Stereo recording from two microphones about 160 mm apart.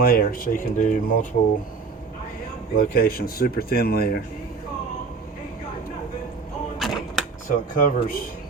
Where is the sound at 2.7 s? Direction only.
70° left (ahead or behind).